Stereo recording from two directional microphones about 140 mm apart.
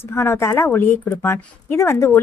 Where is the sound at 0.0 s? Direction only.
15° left (ahead or behind).